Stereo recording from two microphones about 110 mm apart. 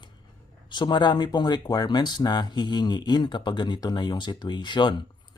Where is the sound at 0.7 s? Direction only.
45° left (ahead or behind).